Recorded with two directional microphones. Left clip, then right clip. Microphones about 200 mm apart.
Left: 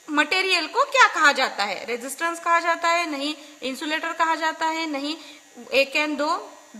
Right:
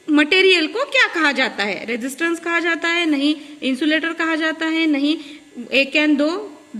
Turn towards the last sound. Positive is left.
turn(degrees=45)  # may be behind; listen again after turning